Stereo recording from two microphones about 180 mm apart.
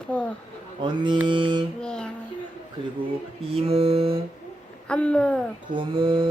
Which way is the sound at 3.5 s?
35° right (ahead or behind).